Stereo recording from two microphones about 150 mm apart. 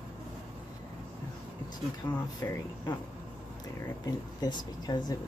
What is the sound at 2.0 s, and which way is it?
Speech, 35° left (ahead or behind).